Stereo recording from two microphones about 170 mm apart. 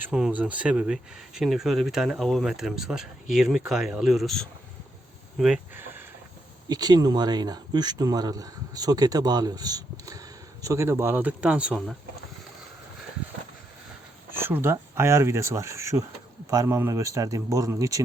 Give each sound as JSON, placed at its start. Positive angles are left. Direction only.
{"t": 0.0, "sound": "speech", "side_deg": -5}
{"t": 6.7, "sound": "speech", "side_deg": -25}
{"t": 14.3, "sound": "speech", "side_deg": -15}